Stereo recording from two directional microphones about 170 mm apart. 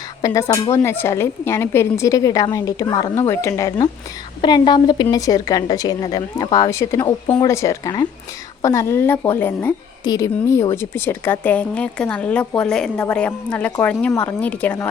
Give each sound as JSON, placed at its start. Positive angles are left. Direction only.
{"t": 0.2, "sound": "a woman's voice", "side_deg": 20}